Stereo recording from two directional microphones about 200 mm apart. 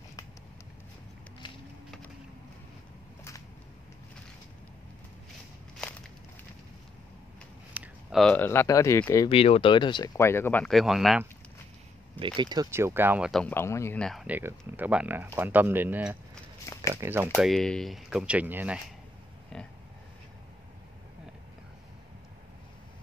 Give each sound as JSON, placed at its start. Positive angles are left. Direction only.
{"t": 1.4, "sound": "a sound", "side_deg": 25}
{"t": 7.7, "sound": "speech", "side_deg": -5}
{"t": 9.3, "sound": "speech", "side_deg": 30}
{"t": 12.4, "sound": "speech", "side_deg": -20}
{"t": 13.3, "sound": "speech", "side_deg": 5}
{"t": 17.4, "sound": "speech", "side_deg": 0}
{"t": 19.5, "sound": "speech", "side_deg": 5}